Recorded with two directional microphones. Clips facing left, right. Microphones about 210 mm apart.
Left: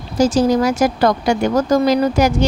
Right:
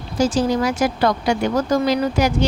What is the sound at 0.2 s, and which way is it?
Speech, 40° left (ahead or behind).